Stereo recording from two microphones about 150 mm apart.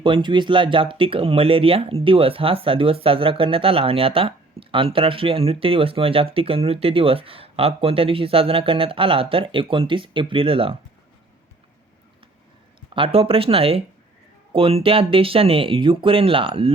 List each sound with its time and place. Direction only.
0.0 s speech: 35° right (ahead or behind)
12.9 s speech: 40° right (ahead or behind)